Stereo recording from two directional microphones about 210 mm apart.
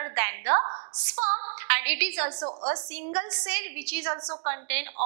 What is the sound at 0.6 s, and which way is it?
Speech, 30° right (ahead or behind).